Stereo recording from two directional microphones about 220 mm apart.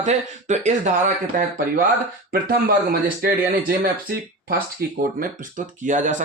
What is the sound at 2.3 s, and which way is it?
Speech, 45° right (ahead or behind).